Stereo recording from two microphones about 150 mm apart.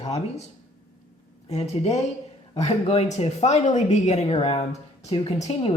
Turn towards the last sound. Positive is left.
turn(degrees=40)  # may be behind; listen again after turning